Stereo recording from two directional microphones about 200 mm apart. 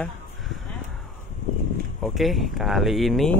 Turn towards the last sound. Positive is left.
turn(degrees=0)  # may be behind; listen again after turning